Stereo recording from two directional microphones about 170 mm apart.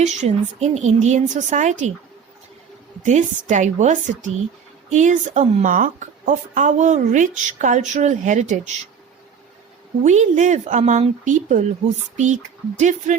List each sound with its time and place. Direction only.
0.0 s a woman's voice: 40° right (ahead or behind)
3.0 s a woman's voice: 45° right (ahead or behind)
10.0 s a woman's voice: 45° right (ahead or behind)